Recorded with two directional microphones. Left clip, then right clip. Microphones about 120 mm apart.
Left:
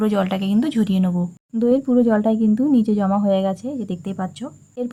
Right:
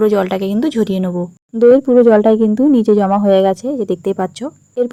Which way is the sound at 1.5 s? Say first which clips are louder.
Right 10 dB; 45° right (ahead or behind).